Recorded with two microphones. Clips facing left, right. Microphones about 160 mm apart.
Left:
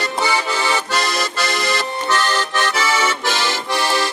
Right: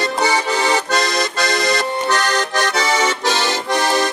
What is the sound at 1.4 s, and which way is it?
Music, 40° right (ahead or behind).